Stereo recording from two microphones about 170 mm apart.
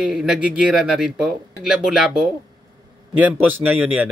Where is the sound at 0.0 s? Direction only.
Centre (ahead or behind).